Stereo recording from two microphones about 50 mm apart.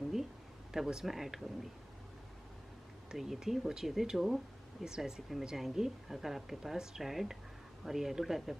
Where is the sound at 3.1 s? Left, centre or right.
Centre.